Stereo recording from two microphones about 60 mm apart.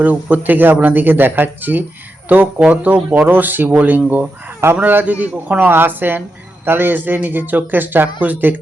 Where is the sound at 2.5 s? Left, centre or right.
Centre.